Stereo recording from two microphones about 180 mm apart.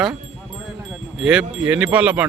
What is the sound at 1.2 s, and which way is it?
Speech, 5° right (ahead or behind).